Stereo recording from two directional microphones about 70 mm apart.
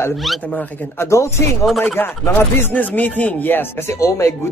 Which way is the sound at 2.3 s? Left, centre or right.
Left.